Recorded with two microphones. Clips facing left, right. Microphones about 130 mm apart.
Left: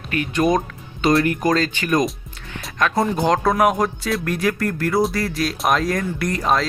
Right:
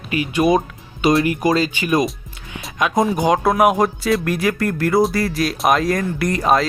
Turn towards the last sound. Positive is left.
turn(degrees=-5)  # may be behind; listen again after turning